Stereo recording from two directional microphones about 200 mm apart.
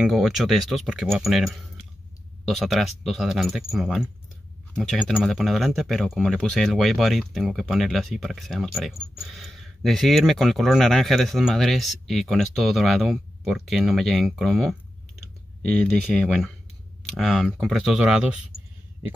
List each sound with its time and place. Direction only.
0.0 s speech: centre (ahead or behind)